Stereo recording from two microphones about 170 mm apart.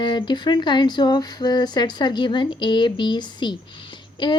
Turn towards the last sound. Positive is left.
turn(degrees=25)  # may be behind; listen again after turning